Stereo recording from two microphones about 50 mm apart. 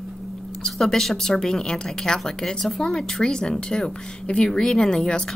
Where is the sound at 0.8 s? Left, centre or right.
Centre.